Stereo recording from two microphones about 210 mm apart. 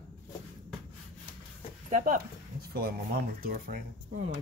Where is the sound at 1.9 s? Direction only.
40° right (ahead or behind).